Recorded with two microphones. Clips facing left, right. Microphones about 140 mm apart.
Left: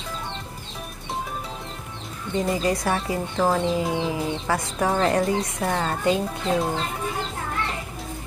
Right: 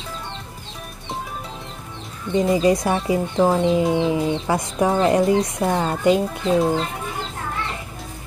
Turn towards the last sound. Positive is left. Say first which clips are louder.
# right 5 dB
turn(degrees=-20)  # may be behind; listen again after turning